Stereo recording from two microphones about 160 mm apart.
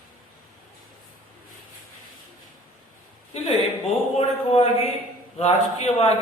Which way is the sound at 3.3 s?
40° left (ahead or behind).